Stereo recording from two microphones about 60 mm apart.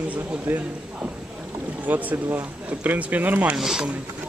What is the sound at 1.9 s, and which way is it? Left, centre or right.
Speech, right.